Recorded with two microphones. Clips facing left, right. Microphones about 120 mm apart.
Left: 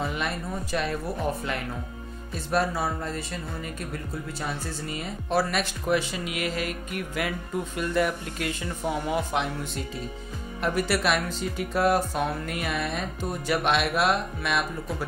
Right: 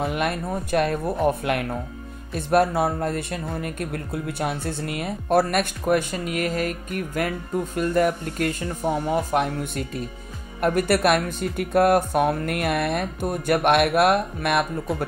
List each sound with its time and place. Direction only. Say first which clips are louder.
0.0 s speech: right 5 dB; 60° right (ahead or behind)